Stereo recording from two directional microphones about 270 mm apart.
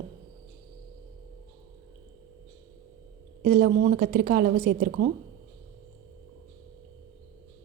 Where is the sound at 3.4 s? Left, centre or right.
Right.